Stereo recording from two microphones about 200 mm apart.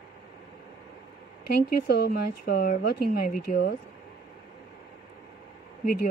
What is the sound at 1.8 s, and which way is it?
Speech, 50° left (ahead or behind).